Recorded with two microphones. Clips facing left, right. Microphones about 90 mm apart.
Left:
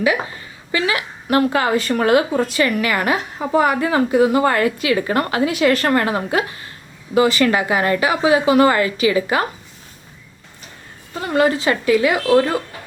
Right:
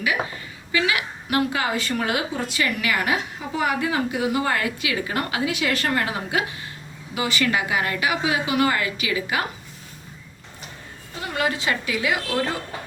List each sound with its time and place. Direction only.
0.7 s a woman's voice: 35° left (ahead or behind)
11.3 s a woman's voice: 40° left (ahead or behind)